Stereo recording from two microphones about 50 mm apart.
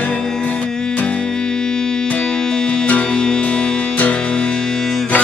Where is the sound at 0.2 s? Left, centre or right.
Centre.